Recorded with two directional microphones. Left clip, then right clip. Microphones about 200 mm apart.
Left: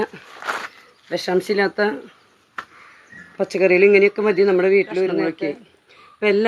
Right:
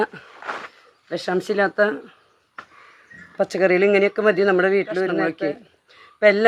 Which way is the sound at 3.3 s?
35° right (ahead or behind).